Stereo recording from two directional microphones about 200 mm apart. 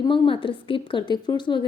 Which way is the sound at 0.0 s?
25° left (ahead or behind).